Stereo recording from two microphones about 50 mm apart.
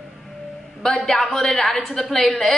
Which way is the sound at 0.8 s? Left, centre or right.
Centre.